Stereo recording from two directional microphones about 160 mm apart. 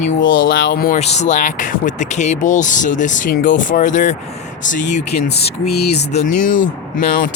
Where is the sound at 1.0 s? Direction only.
45° left (ahead or behind).